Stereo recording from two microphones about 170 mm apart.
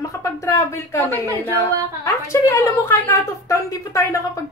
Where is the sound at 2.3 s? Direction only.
15° left (ahead or behind).